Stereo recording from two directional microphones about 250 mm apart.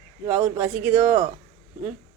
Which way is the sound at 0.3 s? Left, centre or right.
Centre.